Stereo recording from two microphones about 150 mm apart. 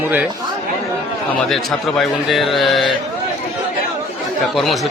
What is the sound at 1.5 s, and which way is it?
Speech, centre (ahead or behind).